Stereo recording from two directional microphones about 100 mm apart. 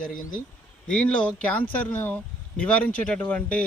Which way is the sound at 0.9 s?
10° left (ahead or behind).